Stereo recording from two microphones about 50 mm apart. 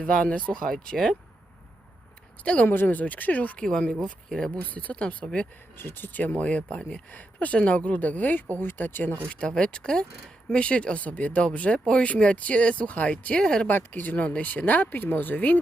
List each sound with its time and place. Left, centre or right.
0.0 s speech: left
2.4 s speech: left
2.6 s speech: left
3.6 s speech: centre
4.7 s speech: left
5.7 s speech: left
6.1 s speech: left
9.3 s speech: centre
13.3 s speech: centre
13.7 s speech: left